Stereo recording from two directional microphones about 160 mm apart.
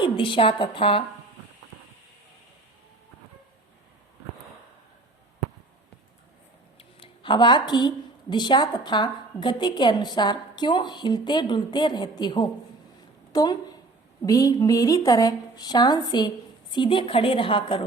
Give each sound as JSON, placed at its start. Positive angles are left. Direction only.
{"t": 0.0, "sound": "a woman's voice", "side_deg": 30}
{"t": 6.7, "sound": "a woman's voice", "side_deg": 35}